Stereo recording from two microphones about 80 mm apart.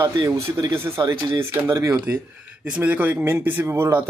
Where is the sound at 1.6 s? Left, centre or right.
Right.